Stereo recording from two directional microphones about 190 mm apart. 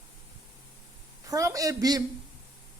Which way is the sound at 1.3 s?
20° right (ahead or behind).